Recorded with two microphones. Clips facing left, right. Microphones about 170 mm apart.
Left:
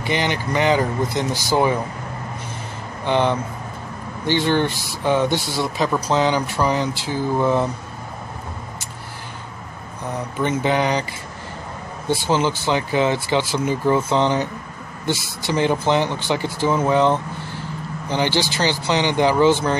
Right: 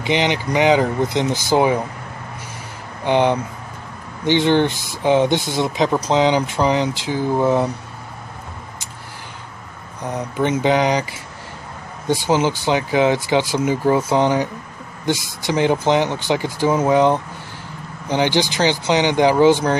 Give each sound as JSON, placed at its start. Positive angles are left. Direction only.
{"t": 0.0, "sound": "speech", "side_deg": -15}
{"t": 3.1, "sound": "speech", "side_deg": -15}
{"t": 10.1, "sound": "speech", "side_deg": -15}